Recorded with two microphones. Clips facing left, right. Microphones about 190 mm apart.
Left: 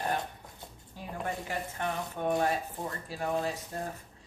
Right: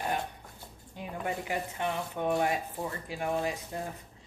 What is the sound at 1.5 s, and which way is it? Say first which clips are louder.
A woman's voice: right 2 dB; 15° right (ahead or behind).